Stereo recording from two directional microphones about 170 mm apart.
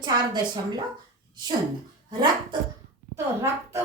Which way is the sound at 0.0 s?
25° right (ahead or behind).